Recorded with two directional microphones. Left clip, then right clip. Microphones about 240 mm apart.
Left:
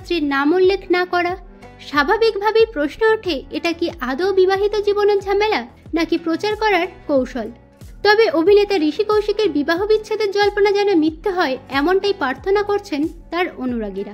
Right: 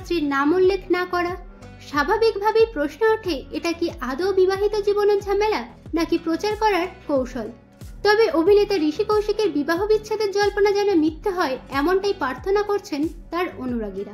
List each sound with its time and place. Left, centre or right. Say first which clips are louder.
0.1 s a woman's voice: left 3 dB; left